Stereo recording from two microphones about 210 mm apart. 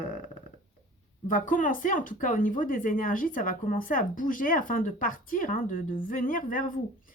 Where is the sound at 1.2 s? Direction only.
40° left (ahead or behind).